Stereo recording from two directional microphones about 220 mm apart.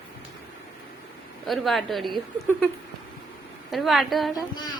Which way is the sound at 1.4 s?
Centre (ahead or behind).